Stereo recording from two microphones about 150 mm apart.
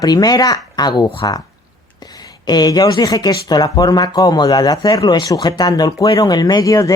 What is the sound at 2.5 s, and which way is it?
Speech, 25° left (ahead or behind).